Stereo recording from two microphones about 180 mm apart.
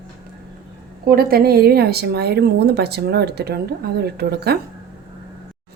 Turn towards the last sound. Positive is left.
turn(degrees=-65)  # may be behind; listen again after turning